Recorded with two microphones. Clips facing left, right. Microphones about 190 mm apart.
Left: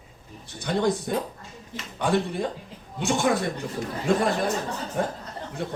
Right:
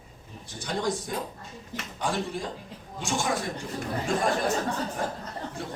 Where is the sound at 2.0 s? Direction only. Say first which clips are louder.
Left 6 dB; 60° left (ahead or behind).